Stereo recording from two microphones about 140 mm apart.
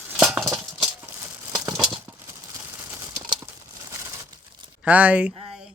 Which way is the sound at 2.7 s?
20° right (ahead or behind).